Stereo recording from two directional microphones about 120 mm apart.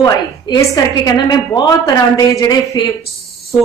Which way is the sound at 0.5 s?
35° left (ahead or behind).